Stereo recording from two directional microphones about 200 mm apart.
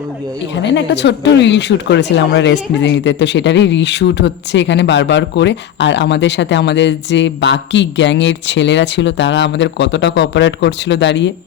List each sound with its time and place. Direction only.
0.6 s speech: 60° left (ahead or behind)